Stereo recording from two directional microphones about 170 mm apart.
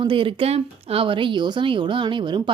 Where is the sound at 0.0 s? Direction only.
30° right (ahead or behind).